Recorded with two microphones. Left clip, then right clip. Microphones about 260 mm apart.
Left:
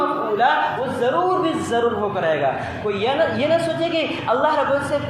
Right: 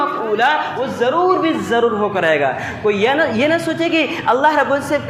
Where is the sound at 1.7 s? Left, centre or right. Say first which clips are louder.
Right 5 dB; right.